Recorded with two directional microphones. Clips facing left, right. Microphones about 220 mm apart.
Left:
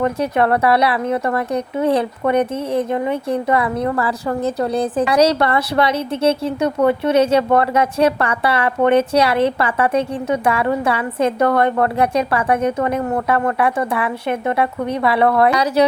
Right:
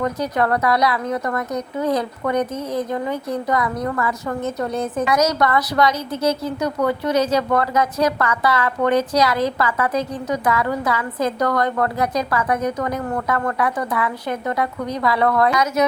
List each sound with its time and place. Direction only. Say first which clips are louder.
0.0 s speech: left 4 dB; 25° left (ahead or behind)